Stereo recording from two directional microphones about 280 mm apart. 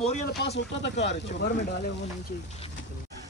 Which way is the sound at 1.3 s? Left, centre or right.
Left.